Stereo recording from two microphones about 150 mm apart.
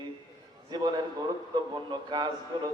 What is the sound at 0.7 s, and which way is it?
Speech, 30° right (ahead or behind).